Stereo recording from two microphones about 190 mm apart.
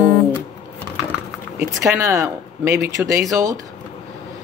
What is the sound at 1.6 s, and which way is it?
Speech, 15° right (ahead or behind).